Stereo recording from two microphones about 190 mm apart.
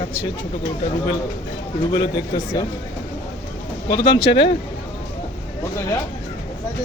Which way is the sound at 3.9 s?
20° left (ahead or behind).